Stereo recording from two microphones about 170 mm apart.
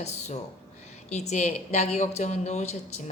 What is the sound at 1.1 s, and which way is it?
A woman's voice, 40° left (ahead or behind).